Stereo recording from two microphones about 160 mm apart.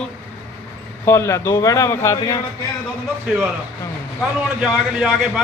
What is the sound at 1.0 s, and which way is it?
A man's voice, 20° left (ahead or behind).